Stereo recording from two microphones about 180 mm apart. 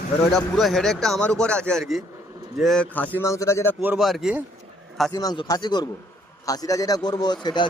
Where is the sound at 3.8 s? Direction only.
Centre (ahead or behind).